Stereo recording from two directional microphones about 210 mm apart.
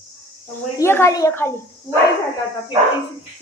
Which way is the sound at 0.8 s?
10° left (ahead or behind).